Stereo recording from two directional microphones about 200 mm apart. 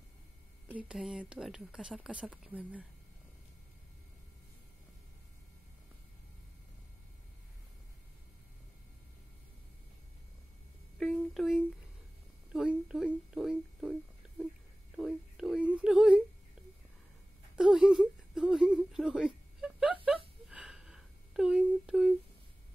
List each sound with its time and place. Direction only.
0.7 s speech: 5° right (ahead or behind)
11.0 s a sound: centre (ahead or behind)
14.2 s whispering: 5° right (ahead or behind)
15.0 s whimper: centre (ahead or behind)
17.6 s whimper: 5° right (ahead or behind)
20.1 s a sound: 5° right (ahead or behind)